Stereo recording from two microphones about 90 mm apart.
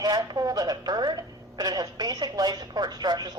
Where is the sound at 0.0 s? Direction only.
50° right (ahead or behind).